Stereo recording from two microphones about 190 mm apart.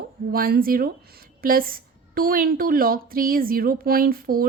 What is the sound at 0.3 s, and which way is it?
A woman's voice, 50° right (ahead or behind).